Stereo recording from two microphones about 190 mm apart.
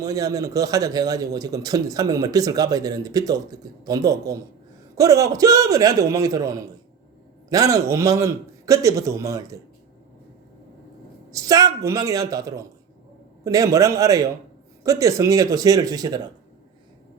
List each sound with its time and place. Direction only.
0.0 s a man's voice: 20° right (ahead or behind)
11.3 s a man's voice: 20° right (ahead or behind)